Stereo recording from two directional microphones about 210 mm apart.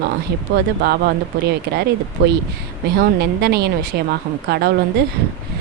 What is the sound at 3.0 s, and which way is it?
Speech, 50° right (ahead or behind).